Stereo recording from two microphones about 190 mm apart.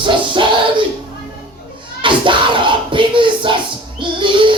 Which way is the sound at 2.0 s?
25° right (ahead or behind).